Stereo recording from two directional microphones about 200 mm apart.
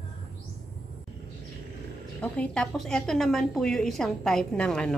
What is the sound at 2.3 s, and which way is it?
A woman's voice, 5° left (ahead or behind).